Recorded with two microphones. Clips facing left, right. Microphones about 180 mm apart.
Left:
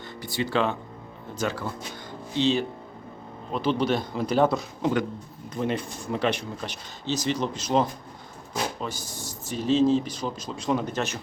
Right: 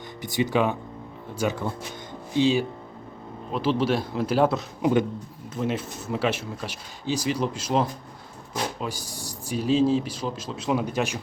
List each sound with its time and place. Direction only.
0.2 s speech: 20° right (ahead or behind)